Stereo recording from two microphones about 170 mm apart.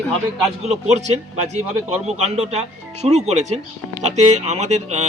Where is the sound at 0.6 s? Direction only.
40° right (ahead or behind).